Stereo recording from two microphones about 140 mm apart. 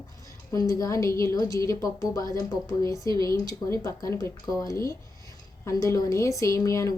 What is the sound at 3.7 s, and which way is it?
A woman's voice, 20° left (ahead or behind).